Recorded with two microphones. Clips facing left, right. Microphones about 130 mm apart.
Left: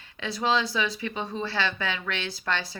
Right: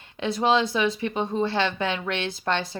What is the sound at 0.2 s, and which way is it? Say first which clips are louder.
Speech: right 4 dB; 25° right (ahead or behind).